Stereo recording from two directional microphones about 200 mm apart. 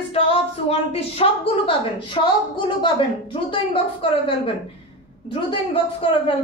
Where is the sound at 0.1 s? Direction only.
30° left (ahead or behind).